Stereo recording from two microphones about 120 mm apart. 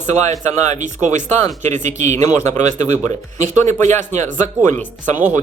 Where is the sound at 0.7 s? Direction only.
90° right.